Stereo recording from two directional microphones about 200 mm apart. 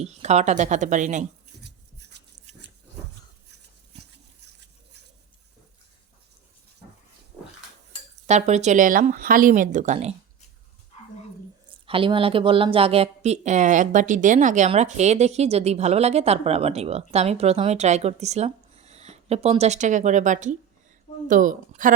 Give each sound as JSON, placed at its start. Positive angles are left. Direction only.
{"t": 0.0, "sound": "speech", "side_deg": -35}
{"t": 1.6, "sound": "a sound", "side_deg": -55}
{"t": 8.3, "sound": "speech", "side_deg": -35}
{"t": 11.9, "sound": "speech", "side_deg": -25}